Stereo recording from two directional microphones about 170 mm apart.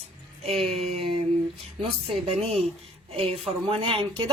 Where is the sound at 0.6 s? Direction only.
35° right (ahead or behind).